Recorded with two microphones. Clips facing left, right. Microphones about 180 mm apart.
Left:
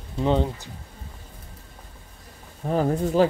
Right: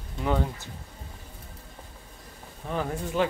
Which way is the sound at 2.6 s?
35° left (ahead or behind).